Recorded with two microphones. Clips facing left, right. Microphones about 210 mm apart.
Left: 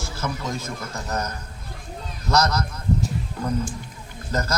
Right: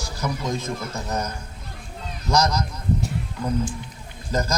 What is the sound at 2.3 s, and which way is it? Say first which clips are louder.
Speech: even; 15° right (ahead or behind).